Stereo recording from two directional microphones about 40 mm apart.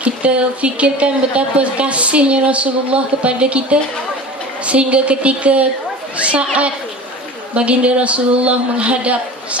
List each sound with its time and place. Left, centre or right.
0.0 s a woman's voice: right
4.6 s a woman's voice: right